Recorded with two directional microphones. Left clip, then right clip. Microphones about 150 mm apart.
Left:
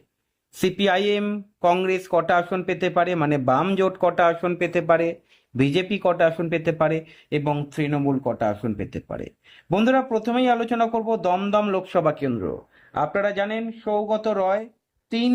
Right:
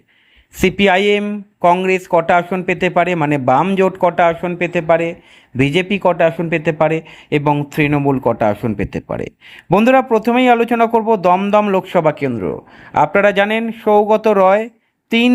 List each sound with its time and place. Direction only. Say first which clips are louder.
0.6 s speech: right 8 dB; 15° right (ahead or behind); by 14.7 s 35° right (ahead or behind)